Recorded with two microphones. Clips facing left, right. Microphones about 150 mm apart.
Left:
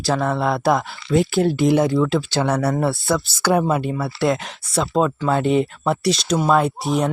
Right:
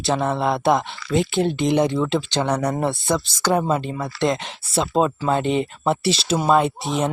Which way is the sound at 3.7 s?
10° left (ahead or behind).